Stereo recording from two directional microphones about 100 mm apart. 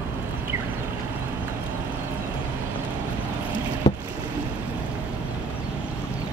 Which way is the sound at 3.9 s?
80° left.